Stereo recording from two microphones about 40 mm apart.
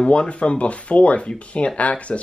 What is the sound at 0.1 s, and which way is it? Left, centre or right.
Speech, left.